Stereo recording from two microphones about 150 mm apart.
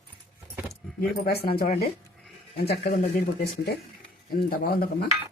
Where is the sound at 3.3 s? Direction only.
90° left.